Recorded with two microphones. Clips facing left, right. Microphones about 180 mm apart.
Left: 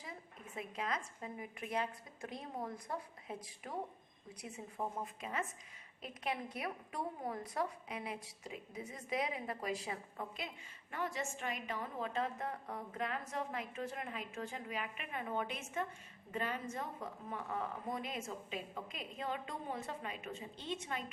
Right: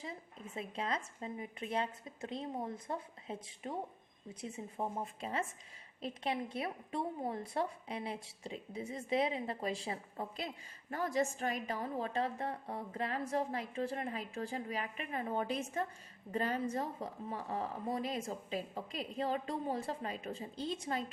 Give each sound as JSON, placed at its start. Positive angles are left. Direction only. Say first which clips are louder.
{"t": 0.5, "sound": "a woman's voice", "louder": "right 2 dB", "side_deg": -25}